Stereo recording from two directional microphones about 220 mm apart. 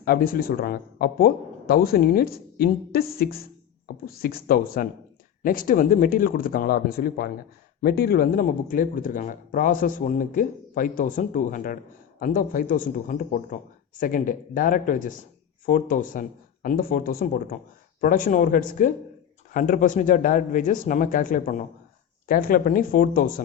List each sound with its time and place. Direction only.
0.0 s speech: 40° left (ahead or behind)